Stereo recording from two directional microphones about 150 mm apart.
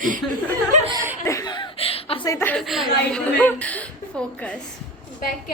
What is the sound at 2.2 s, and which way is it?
Speech, 20° left (ahead or behind).